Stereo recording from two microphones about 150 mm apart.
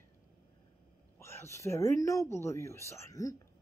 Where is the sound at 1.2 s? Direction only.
15° left (ahead or behind).